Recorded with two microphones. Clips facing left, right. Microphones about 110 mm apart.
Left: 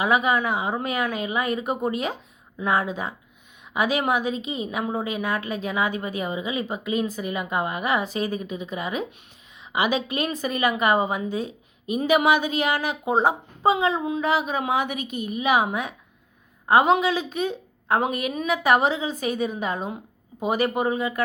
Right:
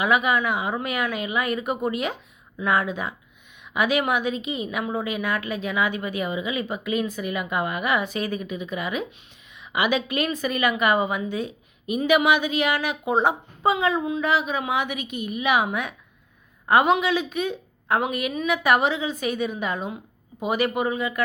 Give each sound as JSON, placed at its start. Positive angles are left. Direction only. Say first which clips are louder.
{"t": 0.0, "sound": "a woman's voice", "louder": "even", "side_deg": 35}